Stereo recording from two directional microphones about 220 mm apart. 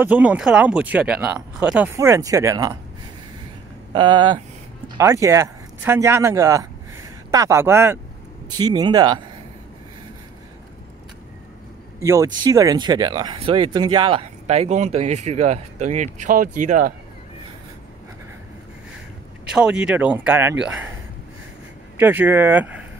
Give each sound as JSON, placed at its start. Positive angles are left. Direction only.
{"t": 0.0, "sound": "speech", "side_deg": -5}
{"t": 3.9, "sound": "speech", "side_deg": -20}
{"t": 12.0, "sound": "speech", "side_deg": -15}
{"t": 19.5, "sound": "speech", "side_deg": -5}
{"t": 21.9, "sound": "speech", "side_deg": -10}